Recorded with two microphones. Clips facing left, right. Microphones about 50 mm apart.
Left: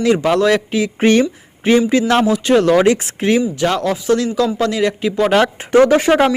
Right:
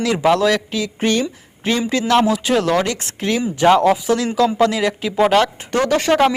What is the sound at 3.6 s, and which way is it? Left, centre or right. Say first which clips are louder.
Speech: right 4 dB; centre.